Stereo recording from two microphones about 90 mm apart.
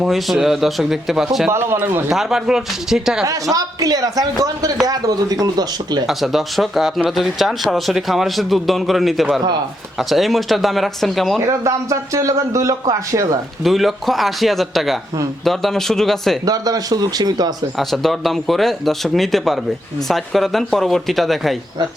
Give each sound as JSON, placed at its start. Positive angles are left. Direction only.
{"t": 0.0, "sound": "speech", "side_deg": 0}
{"t": 1.5, "sound": "speech", "side_deg": -25}
{"t": 2.0, "sound": "speech", "side_deg": -5}
{"t": 3.5, "sound": "a man's voice", "side_deg": -40}
{"t": 6.1, "sound": "speech", "side_deg": 0}
{"t": 11.4, "sound": "a man's voice", "side_deg": -35}
{"t": 13.7, "sound": "speech", "side_deg": 0}
{"t": 16.5, "sound": "a man's voice", "side_deg": -45}
{"t": 17.7, "sound": "speech", "side_deg": 0}